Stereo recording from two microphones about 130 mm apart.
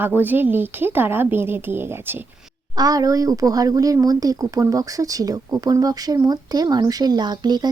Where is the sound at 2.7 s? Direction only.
30° right (ahead or behind).